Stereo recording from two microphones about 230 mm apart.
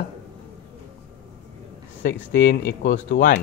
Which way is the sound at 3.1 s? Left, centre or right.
Left.